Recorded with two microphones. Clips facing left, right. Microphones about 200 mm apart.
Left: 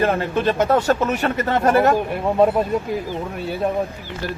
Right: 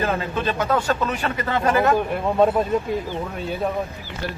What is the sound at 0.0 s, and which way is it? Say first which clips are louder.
Speech: left 4 dB; 50° left (ahead or behind).